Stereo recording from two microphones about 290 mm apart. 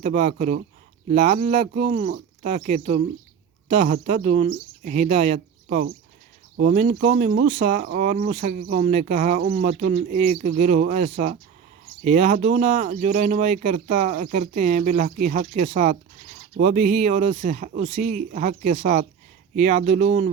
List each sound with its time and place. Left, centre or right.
0.0 s speech: right